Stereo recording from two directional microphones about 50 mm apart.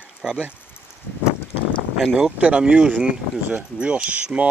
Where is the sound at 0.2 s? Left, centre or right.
Centre.